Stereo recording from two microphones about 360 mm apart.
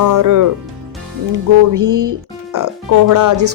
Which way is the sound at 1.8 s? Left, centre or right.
Right.